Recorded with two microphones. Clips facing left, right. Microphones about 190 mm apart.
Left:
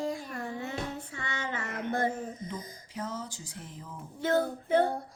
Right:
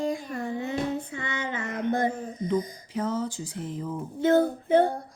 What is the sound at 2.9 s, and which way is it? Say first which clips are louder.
Speech: right 8 dB; 60° right (ahead or behind).